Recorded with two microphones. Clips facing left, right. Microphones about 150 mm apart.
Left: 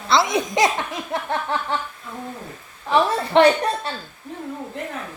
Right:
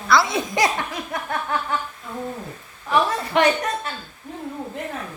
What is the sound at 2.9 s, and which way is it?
A woman's voice, 30° left (ahead or behind).